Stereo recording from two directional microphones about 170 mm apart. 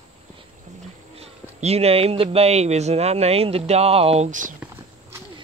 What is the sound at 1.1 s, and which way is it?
Speech, 35° right (ahead or behind).